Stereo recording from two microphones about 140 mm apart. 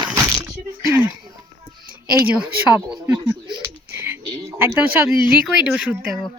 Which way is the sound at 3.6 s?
15° right (ahead or behind).